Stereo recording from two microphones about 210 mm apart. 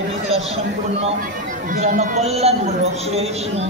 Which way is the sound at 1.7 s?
40° right (ahead or behind).